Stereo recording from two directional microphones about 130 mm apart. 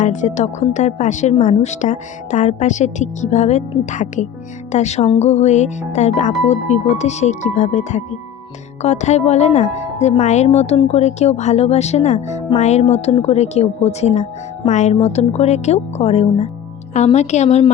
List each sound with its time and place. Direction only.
0.0 s speech: 70° left (ahead or behind)
14.9 s speech: 55° left (ahead or behind)